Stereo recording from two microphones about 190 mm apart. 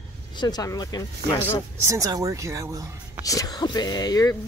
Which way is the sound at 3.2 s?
20° left (ahead or behind).